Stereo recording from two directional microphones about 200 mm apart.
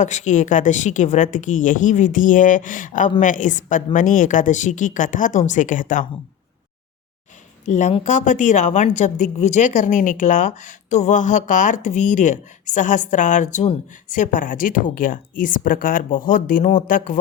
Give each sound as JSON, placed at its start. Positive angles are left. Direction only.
{"t": 0.0, "sound": "a woman's voice", "side_deg": 35}
{"t": 7.6, "sound": "a woman's voice", "side_deg": 35}